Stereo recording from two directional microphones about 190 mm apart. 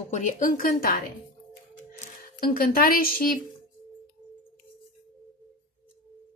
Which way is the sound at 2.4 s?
50° left (ahead or behind).